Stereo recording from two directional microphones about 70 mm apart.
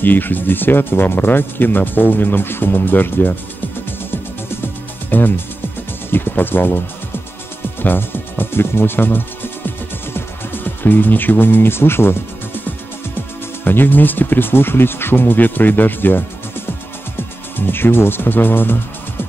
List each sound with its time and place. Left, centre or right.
0.0 s speech: left
5.1 s speech: left
7.8 s speech: left
10.1 s music: left
13.7 s speech: left